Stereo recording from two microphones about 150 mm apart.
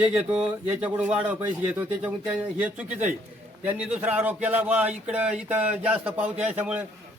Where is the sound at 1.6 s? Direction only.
10° right (ahead or behind).